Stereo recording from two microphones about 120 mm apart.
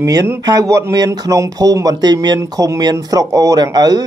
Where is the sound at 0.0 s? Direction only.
25° right (ahead or behind).